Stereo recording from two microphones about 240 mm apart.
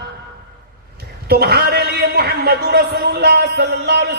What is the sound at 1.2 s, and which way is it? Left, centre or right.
Speech, right.